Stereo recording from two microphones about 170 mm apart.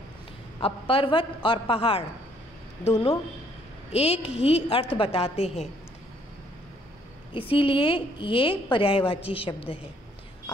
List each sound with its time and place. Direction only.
0.6 s a woman's voice: 30° left (ahead or behind)
3.9 s a woman's voice: 35° left (ahead or behind)
7.3 s a woman's voice: 30° left (ahead or behind)